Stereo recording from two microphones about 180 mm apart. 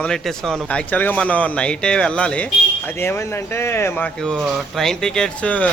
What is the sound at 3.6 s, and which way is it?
Speech, 15° left (ahead or behind).